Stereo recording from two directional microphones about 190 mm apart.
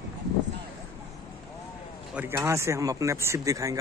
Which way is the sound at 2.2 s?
15° right (ahead or behind).